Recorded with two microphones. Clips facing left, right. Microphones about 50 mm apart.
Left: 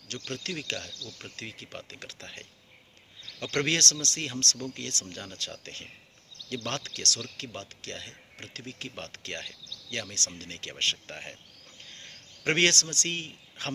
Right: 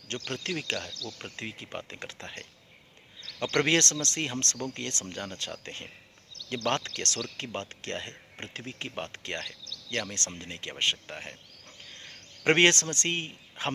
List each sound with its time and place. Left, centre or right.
0.3 s speech: right
10.9 s speech: centre
11.9 s a sound: centre
12.5 s speech: right